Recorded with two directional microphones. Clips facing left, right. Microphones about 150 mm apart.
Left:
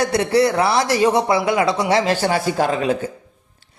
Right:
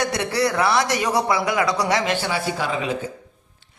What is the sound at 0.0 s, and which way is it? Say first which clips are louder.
Speech: left 5 dB; 30° left (ahead or behind).